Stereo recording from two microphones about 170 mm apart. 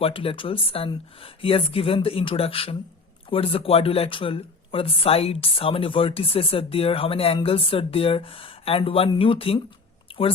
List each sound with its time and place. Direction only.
0.0 s speech: 35° left (ahead or behind)